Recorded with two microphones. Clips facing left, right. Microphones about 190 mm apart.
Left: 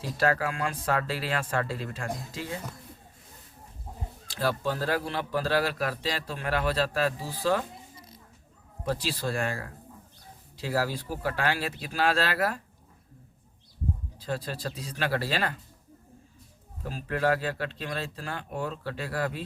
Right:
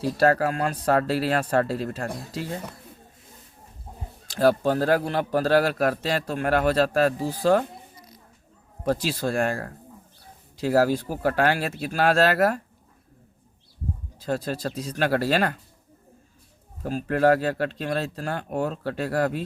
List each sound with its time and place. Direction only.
0.0 s speech: 40° right (ahead or behind)
4.3 s a man's voice: 45° right (ahead or behind)
8.8 s a man's voice: 45° right (ahead or behind)
14.2 s a man's voice: 45° right (ahead or behind)
16.8 s a man's voice: 50° right (ahead or behind)